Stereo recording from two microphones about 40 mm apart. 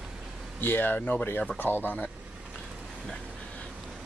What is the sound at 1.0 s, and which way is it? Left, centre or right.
Speech, left.